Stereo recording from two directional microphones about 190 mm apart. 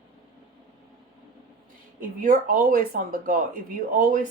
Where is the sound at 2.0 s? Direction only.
45° right (ahead or behind).